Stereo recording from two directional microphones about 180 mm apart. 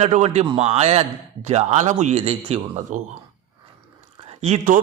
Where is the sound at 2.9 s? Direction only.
45° right (ahead or behind).